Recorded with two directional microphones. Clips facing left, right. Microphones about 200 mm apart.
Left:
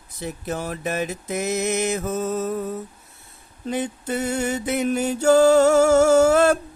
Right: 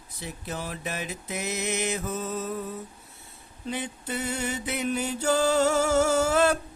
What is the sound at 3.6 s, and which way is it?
Mantra, 45° left (ahead or behind).